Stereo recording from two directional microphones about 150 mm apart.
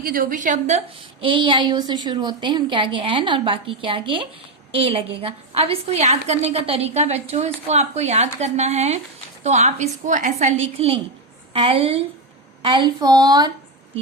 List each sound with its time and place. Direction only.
0.0 s a woman's voice: 70° right (ahead or behind)
1.2 s a woman's voice: 35° right (ahead or behind)